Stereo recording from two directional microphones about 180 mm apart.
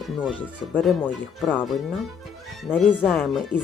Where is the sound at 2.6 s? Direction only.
10° left (ahead or behind).